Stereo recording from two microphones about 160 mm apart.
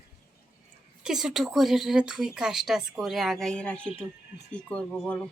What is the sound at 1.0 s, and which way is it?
Speech, 5° right (ahead or behind).